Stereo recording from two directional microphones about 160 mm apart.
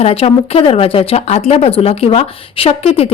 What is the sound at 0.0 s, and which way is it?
Speech, 40° left (ahead or behind).